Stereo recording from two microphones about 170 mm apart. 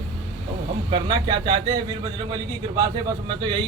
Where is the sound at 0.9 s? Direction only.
25° right (ahead or behind).